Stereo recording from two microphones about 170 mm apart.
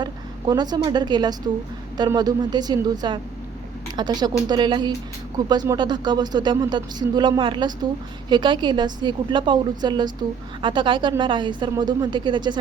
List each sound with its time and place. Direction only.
0.0 s a woman's voice: 25° right (ahead or behind)